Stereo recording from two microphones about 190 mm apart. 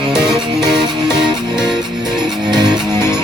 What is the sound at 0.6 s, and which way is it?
Music, 5° right (ahead or behind).